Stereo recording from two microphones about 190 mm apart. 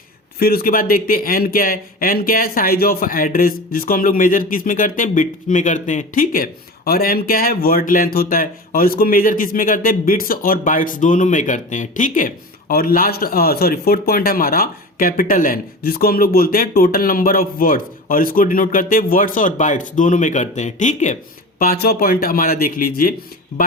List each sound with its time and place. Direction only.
0.3 s speech: 50° left (ahead or behind)
21.6 s speech: 50° left (ahead or behind)